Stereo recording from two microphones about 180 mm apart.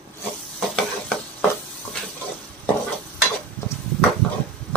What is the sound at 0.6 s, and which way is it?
Stir, 5° left (ahead or behind).